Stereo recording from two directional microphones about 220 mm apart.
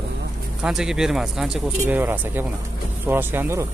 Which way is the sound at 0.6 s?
5° right (ahead or behind).